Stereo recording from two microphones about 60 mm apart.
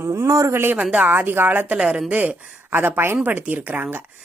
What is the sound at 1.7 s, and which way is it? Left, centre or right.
A woman's voice, right.